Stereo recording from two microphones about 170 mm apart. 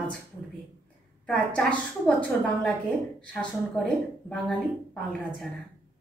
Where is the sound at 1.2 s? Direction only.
5° left (ahead or behind).